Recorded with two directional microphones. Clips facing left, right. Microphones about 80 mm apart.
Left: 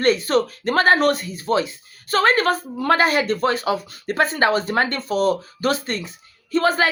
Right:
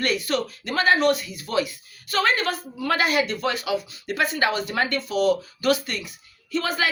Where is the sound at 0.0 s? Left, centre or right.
Left.